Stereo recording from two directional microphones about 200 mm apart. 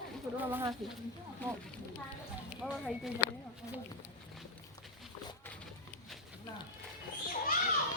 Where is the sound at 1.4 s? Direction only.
10° left (ahead or behind).